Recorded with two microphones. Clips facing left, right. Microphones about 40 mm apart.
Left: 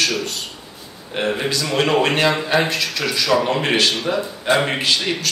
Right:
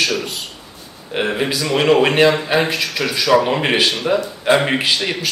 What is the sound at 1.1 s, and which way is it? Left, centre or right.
Speech, centre.